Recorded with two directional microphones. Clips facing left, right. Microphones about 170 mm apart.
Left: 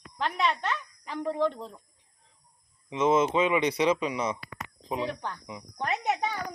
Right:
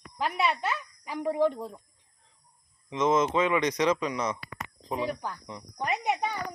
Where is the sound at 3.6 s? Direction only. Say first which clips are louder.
Left 1 dB; 10° left (ahead or behind).